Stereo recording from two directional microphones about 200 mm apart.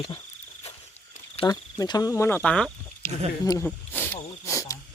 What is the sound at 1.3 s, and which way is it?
Speech, 20° left (ahead or behind).